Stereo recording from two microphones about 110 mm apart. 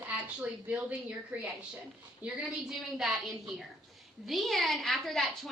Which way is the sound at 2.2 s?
5° right (ahead or behind).